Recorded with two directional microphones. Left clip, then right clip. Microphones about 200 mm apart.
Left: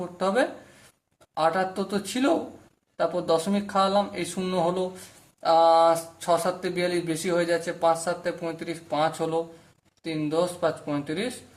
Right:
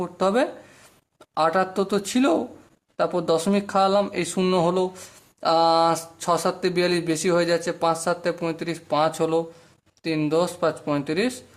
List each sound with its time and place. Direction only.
0.0 s speech: 45° right (ahead or behind)